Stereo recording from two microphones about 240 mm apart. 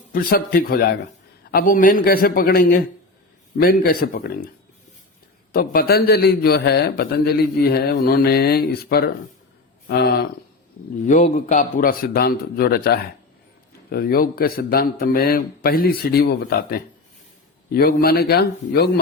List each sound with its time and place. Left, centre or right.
0.1 s a man's voice: left
5.5 s a man's voice: left
11.0 s a man's voice: left